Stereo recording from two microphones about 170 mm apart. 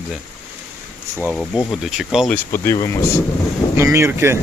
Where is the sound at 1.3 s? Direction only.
Centre (ahead or behind).